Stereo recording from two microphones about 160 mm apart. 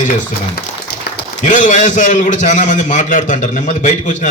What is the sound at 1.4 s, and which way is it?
A man's voice, 50° left (ahead or behind).